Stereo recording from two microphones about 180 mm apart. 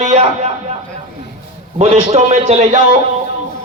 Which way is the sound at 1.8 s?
40° right (ahead or behind).